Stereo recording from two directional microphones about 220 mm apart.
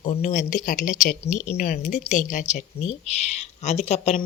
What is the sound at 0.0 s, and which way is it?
Speech, 30° left (ahead or behind).